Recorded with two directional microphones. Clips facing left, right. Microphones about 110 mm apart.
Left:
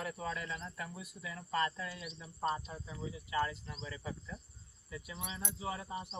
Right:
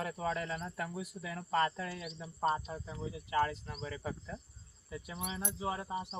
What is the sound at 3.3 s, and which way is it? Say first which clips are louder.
Speech: right 3 dB; 40° right (ahead or behind).